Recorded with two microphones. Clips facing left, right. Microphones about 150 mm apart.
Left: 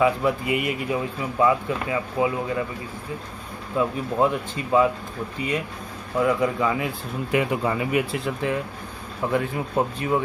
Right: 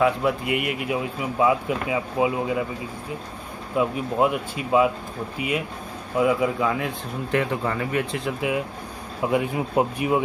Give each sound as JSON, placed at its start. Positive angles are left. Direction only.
{"t": 0.0, "sound": "speech", "side_deg": 0}
{"t": 3.7, "sound": "speech", "side_deg": -10}
{"t": 6.1, "sound": "speech", "side_deg": -5}
{"t": 8.3, "sound": "speech", "side_deg": -10}